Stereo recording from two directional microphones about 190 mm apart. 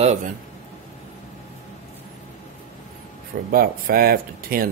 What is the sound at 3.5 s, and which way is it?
Speech, 50° right (ahead or behind).